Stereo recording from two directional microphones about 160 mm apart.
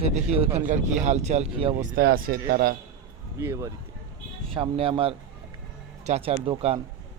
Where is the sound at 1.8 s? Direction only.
65° right (ahead or behind).